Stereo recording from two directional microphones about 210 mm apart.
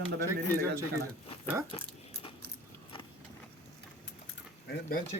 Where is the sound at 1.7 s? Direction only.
25° left (ahead or behind).